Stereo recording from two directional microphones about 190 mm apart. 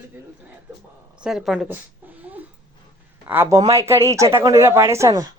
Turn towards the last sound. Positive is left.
turn(degrees=-20)  # may be behind; listen again after turning